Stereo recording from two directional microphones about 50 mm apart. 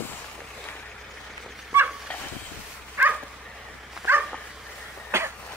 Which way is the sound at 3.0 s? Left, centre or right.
Right.